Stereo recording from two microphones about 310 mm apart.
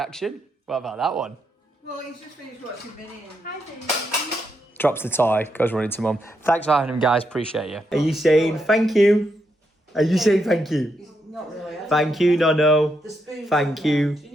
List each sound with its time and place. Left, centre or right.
0.0 s speech: centre
3.4 s speech: left
4.8 s speech: centre
11.9 s speech: centre